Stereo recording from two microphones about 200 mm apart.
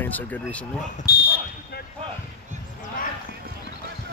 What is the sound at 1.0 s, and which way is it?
Speech, 50° left (ahead or behind).